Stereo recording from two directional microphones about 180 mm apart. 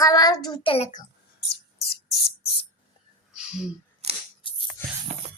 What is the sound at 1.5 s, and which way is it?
Music, 60° left (ahead or behind).